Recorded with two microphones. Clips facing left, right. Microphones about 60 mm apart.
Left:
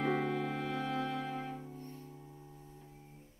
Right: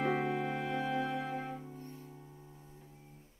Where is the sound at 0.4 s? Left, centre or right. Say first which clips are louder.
Right 1 dB; right.